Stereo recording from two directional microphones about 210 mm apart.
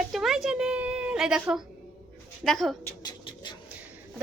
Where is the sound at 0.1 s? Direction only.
Centre (ahead or behind).